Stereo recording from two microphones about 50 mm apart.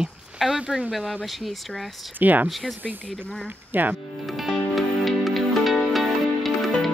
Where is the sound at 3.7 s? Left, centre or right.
Right.